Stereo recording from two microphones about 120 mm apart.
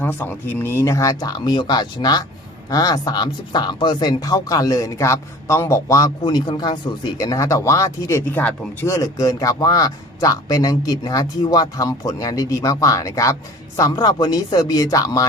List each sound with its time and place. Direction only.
0.0 s speech: 20° left (ahead or behind); by 6.7 s 40° left (ahead or behind)
7.2 s speech: 25° left (ahead or behind)